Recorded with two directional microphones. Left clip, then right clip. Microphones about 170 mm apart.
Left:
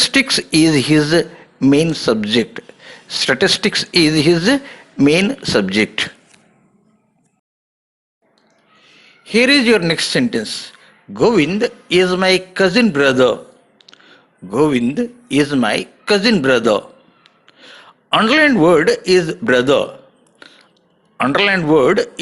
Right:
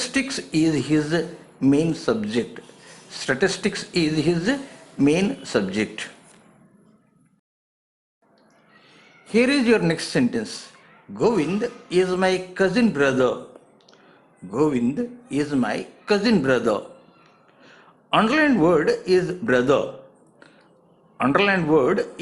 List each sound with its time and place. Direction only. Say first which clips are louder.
0.0 s a man's voice: left 11 dB; 30° left (ahead or behind)
9.2 s a man's voice: left 7 dB; 15° left (ahead or behind)
14.4 s a man's voice: left 7 dB; 20° left (ahead or behind)
21.2 s a man's voice: left 5 dB; 20° left (ahead or behind)